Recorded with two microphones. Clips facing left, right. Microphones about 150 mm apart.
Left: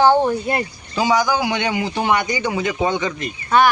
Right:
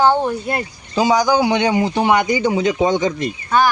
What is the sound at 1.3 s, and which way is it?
Speech, 35° right (ahead or behind).